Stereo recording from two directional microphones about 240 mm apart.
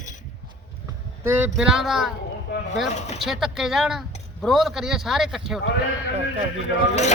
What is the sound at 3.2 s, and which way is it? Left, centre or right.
Speech, centre.